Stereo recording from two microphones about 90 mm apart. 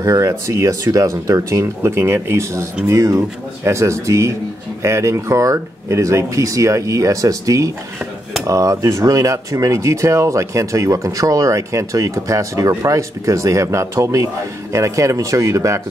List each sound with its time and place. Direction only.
0.0 s speech: 40° right (ahead or behind)